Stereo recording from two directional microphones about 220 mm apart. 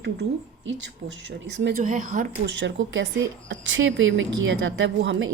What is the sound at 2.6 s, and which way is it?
Speech, 55° right (ahead or behind).